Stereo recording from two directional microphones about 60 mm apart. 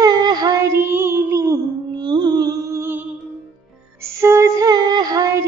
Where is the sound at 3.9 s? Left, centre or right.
Right.